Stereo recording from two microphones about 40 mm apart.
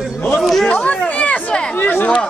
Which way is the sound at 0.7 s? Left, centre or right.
Left.